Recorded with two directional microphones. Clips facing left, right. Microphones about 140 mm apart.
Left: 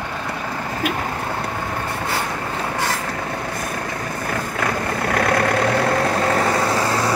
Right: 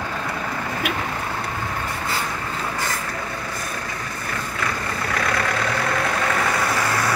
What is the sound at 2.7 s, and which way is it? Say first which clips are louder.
Vehicle: left 4 dB; 65° left (ahead or behind).